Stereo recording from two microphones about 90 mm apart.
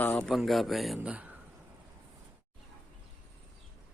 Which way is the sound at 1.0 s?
15° right (ahead or behind).